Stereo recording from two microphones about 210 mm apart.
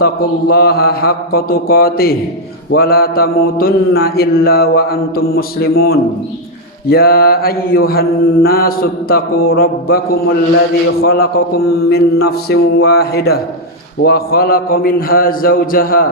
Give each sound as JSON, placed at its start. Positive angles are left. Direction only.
{"t": 0.0, "sound": "mantra", "side_deg": 45}